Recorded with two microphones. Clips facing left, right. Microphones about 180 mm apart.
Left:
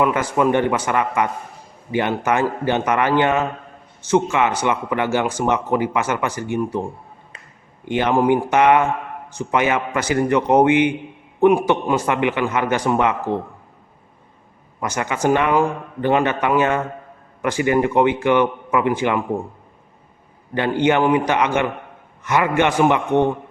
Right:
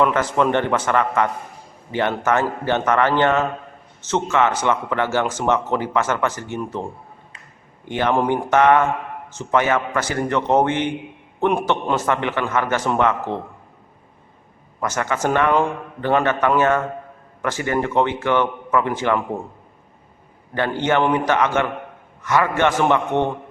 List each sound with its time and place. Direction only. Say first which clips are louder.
0.0 s speech: even; 10° left (ahead or behind)
7.9 s speech: left 3 dB; 15° left (ahead or behind)
14.8 s speech: even; 15° left (ahead or behind)
20.5 s speech: left 3 dB; 15° left (ahead or behind)